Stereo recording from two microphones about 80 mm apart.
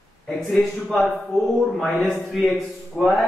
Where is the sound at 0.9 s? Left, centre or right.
Centre.